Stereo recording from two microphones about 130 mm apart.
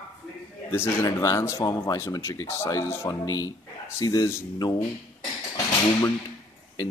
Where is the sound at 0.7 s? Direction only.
20° left (ahead or behind).